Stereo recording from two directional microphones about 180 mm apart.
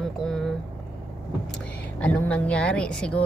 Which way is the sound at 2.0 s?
5° left (ahead or behind).